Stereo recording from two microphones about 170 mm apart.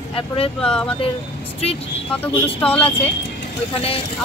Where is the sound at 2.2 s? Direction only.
5° left (ahead or behind).